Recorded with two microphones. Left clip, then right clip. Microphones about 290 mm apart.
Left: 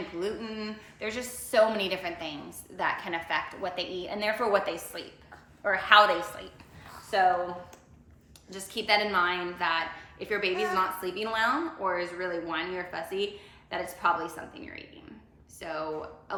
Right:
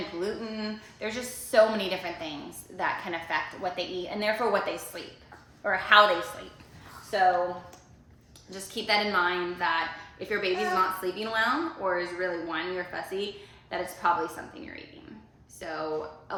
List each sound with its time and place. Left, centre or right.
0.2 s a woman's voice: centre
7.1 s a woman's voice: centre
8.4 s a woman's voice: centre
15.5 s speech: centre